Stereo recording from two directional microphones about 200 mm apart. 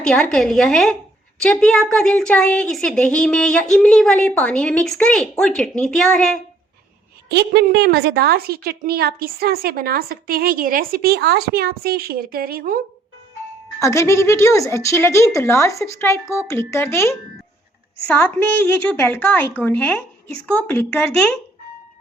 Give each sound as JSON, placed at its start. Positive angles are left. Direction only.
{"t": 0.0, "sound": "a woman's voice", "side_deg": 5}
{"t": 7.3, "sound": "a woman's voice", "side_deg": -55}
{"t": 13.7, "sound": "a woman's voice", "side_deg": 15}